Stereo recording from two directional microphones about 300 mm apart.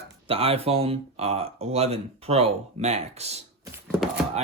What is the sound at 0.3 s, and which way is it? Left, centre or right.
Speech, centre.